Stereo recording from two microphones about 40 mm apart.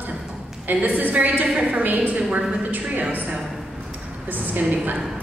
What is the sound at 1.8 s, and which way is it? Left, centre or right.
A woman's voice, right.